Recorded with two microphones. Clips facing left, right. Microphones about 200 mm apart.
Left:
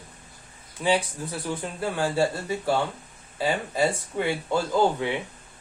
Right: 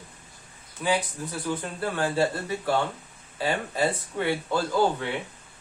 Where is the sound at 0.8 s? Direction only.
25° left (ahead or behind).